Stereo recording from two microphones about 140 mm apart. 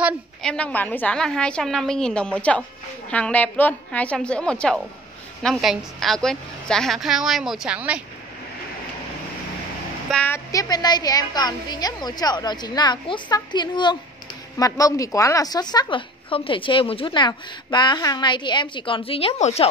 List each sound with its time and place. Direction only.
0.4 s a woman's voice: 5° left (ahead or behind); by 8.0 s 10° right (ahead or behind)
10.1 s a woman's voice: 15° left (ahead or behind)
10.5 s a woman's voice: 25° left (ahead or behind); by 19.7 s 50° left (ahead or behind)